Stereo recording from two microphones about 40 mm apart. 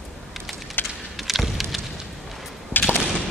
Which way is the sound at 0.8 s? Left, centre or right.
Left.